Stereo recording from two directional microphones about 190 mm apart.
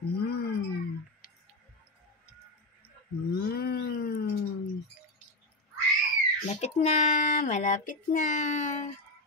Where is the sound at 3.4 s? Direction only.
55° left (ahead or behind).